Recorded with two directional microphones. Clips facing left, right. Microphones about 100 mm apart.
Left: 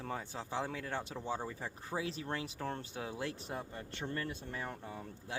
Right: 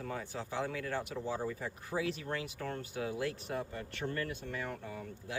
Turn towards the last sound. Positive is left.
turn(degrees=30)  # may be behind; listen again after turning